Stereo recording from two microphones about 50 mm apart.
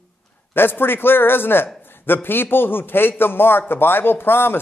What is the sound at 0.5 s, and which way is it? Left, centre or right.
A man's voice, left.